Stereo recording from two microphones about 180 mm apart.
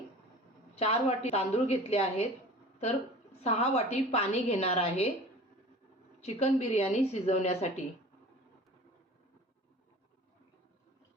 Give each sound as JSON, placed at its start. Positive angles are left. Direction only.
{"t": 0.8, "sound": "a woman's voice", "side_deg": 35}
{"t": 3.4, "sound": "a woman's voice", "side_deg": 35}
{"t": 6.2, "sound": "a woman's voice", "side_deg": 35}